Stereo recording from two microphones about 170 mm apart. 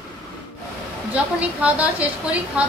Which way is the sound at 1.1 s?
5° right (ahead or behind).